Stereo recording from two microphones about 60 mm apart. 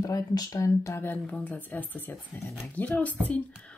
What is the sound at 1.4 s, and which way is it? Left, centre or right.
Speech, left.